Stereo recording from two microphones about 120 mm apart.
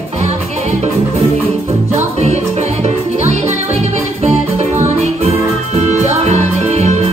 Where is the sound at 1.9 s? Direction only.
70° right (ahead or behind).